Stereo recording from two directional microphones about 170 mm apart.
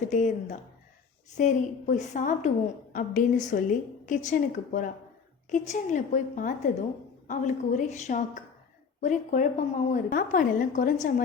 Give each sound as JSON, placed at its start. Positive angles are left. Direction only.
{"t": 0.0, "sound": "a woman's voice", "side_deg": 45}